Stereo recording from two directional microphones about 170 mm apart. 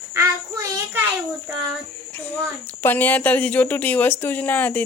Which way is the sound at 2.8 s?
10° left (ahead or behind).